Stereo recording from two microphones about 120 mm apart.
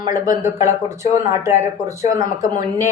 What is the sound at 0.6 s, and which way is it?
Speech, 25° right (ahead or behind).